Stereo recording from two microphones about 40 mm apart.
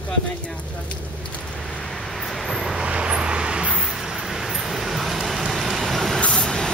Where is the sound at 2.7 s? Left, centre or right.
Right.